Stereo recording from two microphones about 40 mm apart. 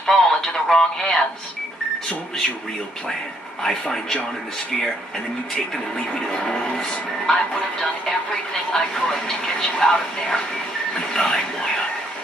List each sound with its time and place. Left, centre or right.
0.0 s a sound: centre
0.7 s speech: centre
3.6 s speech: centre
5.9 s speech: centre
8.7 s speech: centre